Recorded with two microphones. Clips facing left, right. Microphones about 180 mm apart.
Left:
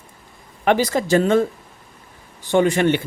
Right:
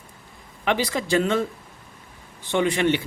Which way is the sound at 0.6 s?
45° left (ahead or behind).